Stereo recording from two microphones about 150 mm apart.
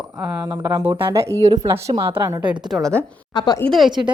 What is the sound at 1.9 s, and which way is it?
Speech, 35° right (ahead or behind).